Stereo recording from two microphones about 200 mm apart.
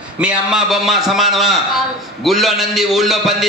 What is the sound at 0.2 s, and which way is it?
A man's voice, 5° right (ahead or behind).